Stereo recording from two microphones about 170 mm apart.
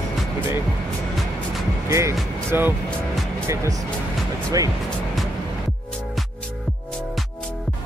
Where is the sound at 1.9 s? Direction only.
15° right (ahead or behind).